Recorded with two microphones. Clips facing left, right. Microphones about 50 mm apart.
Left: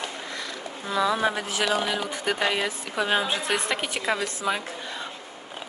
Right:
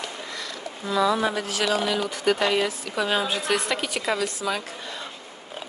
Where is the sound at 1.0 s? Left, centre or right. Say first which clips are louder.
Left 1 dB; left.